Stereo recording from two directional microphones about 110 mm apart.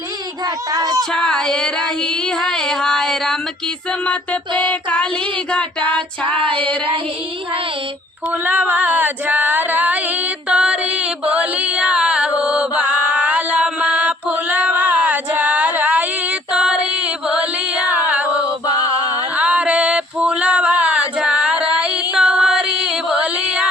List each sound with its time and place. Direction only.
0.7 s speech: 35° right (ahead or behind)
1.1 s a sound: 5° left (ahead or behind)
4.6 s child singing: 15° left (ahead or behind)
5.8 s music: 50° right (ahead or behind)
8.4 s female singing: 15° right (ahead or behind)
10.5 s music: 10° right (ahead or behind)
16.5 s female singing: 10° right (ahead or behind)
17.2 s chant: 10° right (ahead or behind)
19.4 s a sound: 10° right (ahead or behind)